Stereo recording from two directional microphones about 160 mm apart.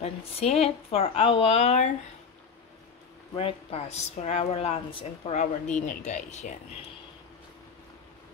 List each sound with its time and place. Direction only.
0.0 s speech: 40° left (ahead or behind)
3.3 s speech: 40° left (ahead or behind)